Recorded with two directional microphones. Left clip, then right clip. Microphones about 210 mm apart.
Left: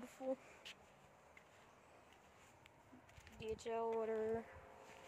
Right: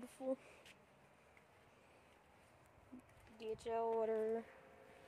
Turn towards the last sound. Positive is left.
turn(degrees=-15)  # may be behind; listen again after turning